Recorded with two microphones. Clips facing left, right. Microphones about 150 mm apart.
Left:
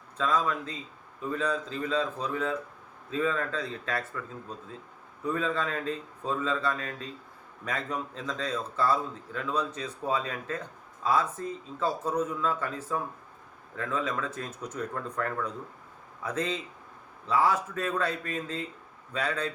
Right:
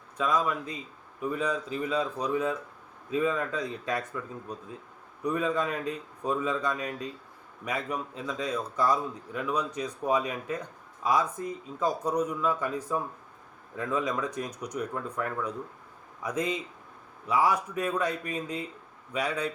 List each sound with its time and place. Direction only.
0.2 s a man's voice: 10° right (ahead or behind)